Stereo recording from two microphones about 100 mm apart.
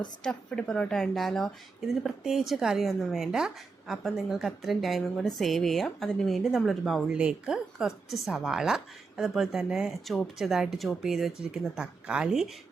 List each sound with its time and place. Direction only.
0.2 s speech: 5° left (ahead or behind)